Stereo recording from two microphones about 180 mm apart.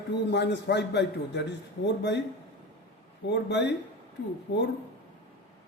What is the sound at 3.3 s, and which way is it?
Speech, 75° left (ahead or behind).